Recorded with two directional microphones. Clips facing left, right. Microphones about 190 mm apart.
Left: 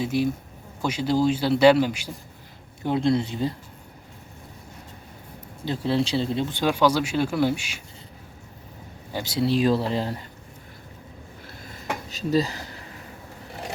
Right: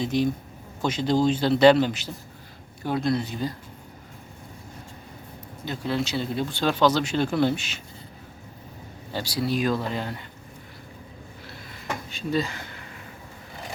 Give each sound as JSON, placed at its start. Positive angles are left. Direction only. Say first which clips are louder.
{"t": 0.0, "sound": "speech", "louder": "even", "side_deg": 5}
{"t": 2.8, "sound": "speech", "louder": "left 3 dB", "side_deg": 25}
{"t": 5.6, "sound": "speech", "louder": "left 4 dB", "side_deg": 30}
{"t": 9.1, "sound": "speech", "louder": "left 3 dB", "side_deg": 25}
{"t": 12.1, "sound": "speech", "louder": "left 4 dB", "side_deg": 35}